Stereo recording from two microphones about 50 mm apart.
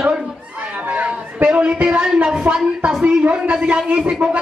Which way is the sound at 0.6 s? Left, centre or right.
Right.